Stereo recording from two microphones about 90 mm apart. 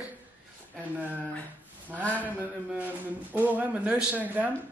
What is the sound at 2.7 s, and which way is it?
Speech, 20° right (ahead or behind).